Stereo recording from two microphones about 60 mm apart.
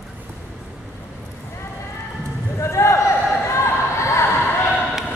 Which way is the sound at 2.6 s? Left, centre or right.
Left.